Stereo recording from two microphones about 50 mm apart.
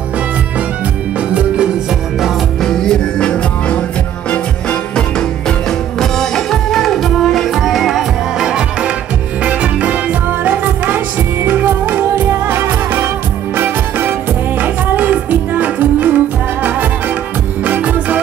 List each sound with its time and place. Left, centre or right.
2.6 s music: centre
5.9 s music: centre
9.4 s music: right
14.6 s music: right
17.6 s music: right